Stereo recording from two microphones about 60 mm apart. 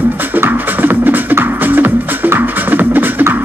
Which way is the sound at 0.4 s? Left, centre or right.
Right.